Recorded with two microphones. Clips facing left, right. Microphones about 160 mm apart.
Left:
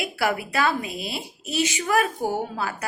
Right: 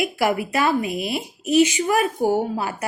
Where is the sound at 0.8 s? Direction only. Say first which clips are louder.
Right 7 dB; 55° right (ahead or behind).